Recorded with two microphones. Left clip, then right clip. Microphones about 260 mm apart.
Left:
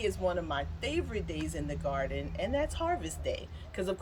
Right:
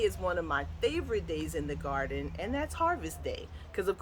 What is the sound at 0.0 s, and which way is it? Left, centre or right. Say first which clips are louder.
Speech: right 1 dB; centre.